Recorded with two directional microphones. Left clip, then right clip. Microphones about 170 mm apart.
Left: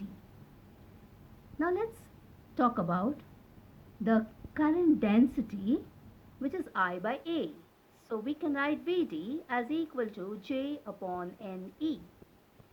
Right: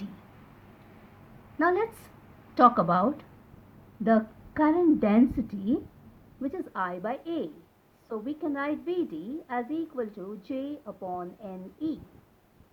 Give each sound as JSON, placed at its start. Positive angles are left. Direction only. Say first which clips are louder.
{"t": 1.5, "sound": "a woman's voice", "louder": "right 7 dB", "side_deg": -35}